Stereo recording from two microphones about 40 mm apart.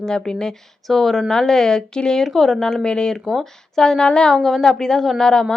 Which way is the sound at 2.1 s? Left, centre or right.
Centre.